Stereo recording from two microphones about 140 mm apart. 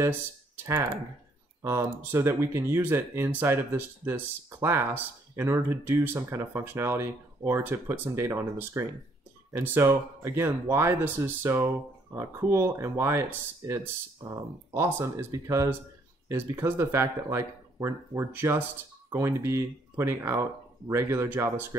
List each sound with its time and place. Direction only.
1.6 s speech: 20° right (ahead or behind)
14.7 s speech: 20° right (ahead or behind)